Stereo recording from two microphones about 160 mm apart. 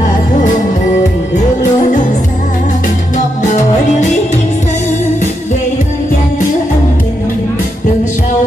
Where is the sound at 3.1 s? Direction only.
50° left (ahead or behind).